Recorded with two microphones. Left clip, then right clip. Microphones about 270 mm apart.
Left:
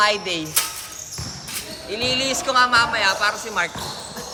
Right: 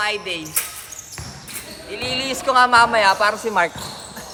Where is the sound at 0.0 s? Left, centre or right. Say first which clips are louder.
Left 4 dB; left.